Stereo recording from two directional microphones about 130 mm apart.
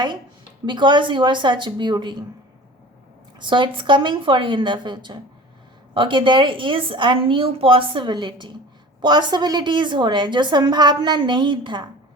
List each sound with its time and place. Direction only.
0.6 s a woman's voice: 35° right (ahead or behind)
3.3 s a woman's voice: 40° right (ahead or behind)